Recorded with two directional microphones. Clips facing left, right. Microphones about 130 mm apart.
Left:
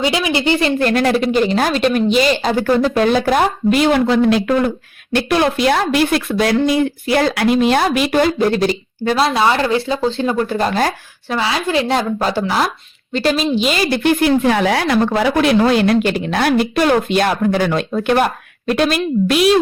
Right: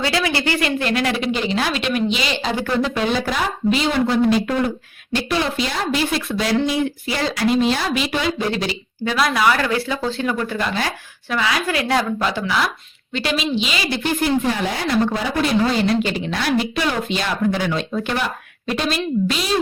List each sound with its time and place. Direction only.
0.0 s speech: 15° left (ahead or behind)
0.8 s speech: 45° left (ahead or behind); by 4.7 s 80° left
5.1 s a woman's voice: 60° left (ahead or behind); by 9.2 s 40° left (ahead or behind)
9.2 s speech: 25° left (ahead or behind)
11.3 s speech: 30° left (ahead or behind)
12.2 s a woman's voice: 40° left (ahead or behind); by 19.5 s 60° left (ahead or behind)